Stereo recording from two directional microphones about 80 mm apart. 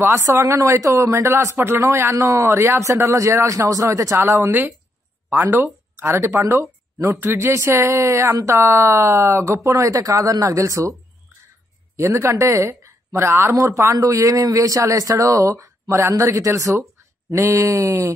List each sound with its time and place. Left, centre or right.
0.1 s speech: right
5.9 s speech: right
12.0 s speech: right